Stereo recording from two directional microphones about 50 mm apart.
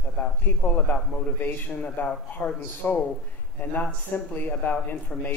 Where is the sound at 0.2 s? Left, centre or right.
Left.